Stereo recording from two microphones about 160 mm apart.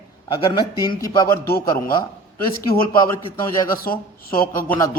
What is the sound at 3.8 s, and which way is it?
Speech, 65° left (ahead or behind).